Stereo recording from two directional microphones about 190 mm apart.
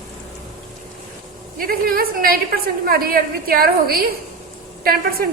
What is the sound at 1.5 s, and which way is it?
A woman's voice, 50° right (ahead or behind).